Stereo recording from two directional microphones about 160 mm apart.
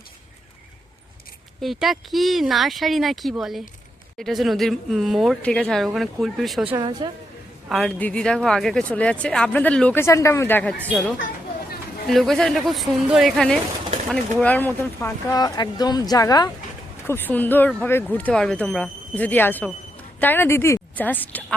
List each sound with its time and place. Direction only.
1.6 s speech: centre (ahead or behind)
6.7 s a woman's voice: 30° right (ahead or behind)
7.7 s speech: 5° left (ahead or behind)
12.0 s speech: centre (ahead or behind)
15.0 s speech: 20° left (ahead or behind)
17.1 s a woman's voice: 10° left (ahead or behind)